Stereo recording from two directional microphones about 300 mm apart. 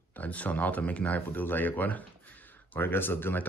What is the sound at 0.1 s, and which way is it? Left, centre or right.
Speech, centre.